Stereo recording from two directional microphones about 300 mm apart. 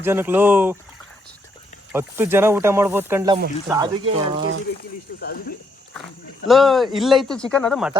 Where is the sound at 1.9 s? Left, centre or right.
Centre.